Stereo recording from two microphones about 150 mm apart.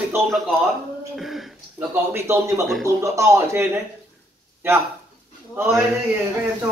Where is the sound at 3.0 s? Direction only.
20° right (ahead or behind).